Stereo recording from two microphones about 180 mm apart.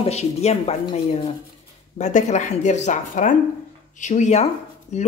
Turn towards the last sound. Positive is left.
turn(degrees=40)  # may be behind; listen again after turning